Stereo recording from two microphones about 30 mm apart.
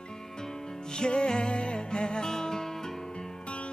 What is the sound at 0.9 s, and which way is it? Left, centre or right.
Music, left.